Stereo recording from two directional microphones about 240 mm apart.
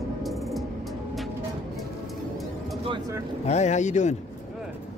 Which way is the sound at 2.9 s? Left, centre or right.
Centre.